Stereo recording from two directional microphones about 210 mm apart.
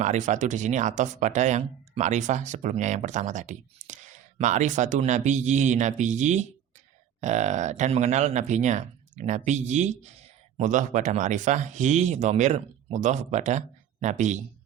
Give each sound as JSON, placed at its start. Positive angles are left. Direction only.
{"t": 0.0, "sound": "speech", "side_deg": -35}